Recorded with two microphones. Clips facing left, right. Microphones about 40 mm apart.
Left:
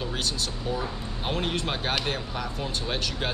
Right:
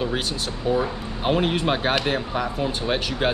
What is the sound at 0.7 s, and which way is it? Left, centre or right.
Speech, centre.